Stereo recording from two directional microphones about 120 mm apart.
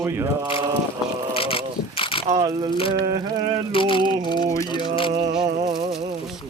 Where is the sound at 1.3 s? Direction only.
50° left (ahead or behind).